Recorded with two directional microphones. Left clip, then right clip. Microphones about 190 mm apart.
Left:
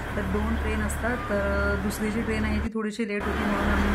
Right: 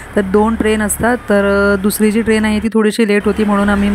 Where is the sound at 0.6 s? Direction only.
50° right (ahead or behind).